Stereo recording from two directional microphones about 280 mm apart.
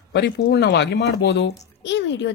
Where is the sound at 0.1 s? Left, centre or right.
Left.